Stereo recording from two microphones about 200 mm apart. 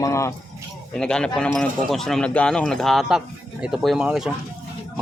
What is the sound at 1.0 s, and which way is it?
Speech, 5° left (ahead or behind).